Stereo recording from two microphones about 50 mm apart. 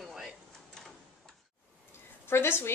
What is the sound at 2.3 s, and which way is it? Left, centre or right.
Speech, left.